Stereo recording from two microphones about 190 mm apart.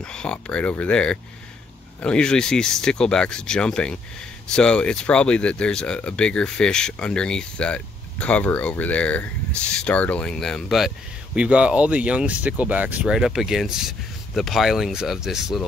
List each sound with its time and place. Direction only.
0.0 s speech: 5° left (ahead or behind)